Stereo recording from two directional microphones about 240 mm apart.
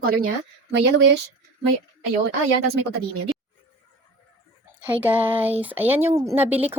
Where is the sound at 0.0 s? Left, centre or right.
Right.